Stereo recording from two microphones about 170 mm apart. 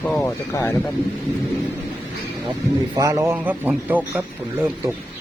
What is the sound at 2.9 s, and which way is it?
A man's voice, 20° right (ahead or behind).